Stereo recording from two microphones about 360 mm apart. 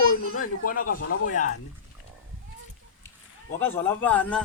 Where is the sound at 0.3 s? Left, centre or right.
Left.